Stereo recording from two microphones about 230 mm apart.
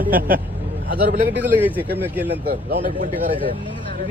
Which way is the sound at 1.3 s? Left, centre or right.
Centre.